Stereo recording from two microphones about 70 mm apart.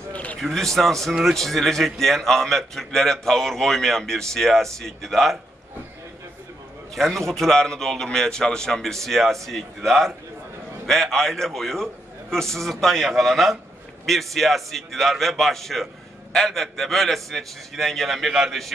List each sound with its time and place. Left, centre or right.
0.1 s a sound: centre
0.4 s a man's voice: centre
7.0 s a man's voice: centre